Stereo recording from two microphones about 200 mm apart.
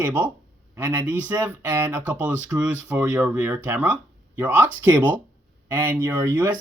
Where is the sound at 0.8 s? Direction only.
10° right (ahead or behind).